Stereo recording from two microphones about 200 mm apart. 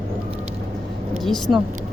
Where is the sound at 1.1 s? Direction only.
Centre (ahead or behind).